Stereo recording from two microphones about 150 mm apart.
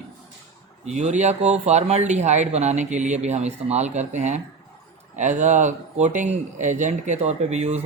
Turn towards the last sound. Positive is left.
turn(degrees=-45)  # may be behind; listen again after turning